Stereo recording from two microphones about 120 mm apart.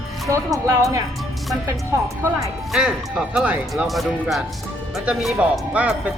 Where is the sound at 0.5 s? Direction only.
25° right (ahead or behind).